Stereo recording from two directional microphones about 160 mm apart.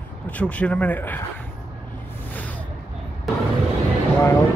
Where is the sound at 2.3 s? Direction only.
10° left (ahead or behind).